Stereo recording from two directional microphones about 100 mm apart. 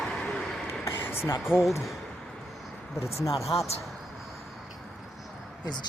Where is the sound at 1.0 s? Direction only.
25° left (ahead or behind).